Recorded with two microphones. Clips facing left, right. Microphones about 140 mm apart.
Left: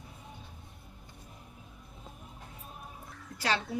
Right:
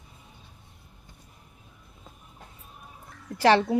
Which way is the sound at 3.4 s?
75° right (ahead or behind).